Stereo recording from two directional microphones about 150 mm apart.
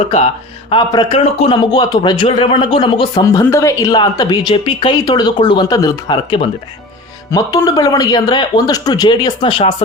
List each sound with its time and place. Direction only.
0.7 s speech: 35° left (ahead or behind)
1.2 s speech: 45° left (ahead or behind)
1.7 s speech: 30° left (ahead or behind)
3.4 s speech: 20° left (ahead or behind); by 9.7 s 35° left (ahead or behind)